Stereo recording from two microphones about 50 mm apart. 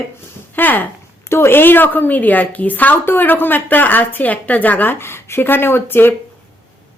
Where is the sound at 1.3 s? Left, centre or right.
Left.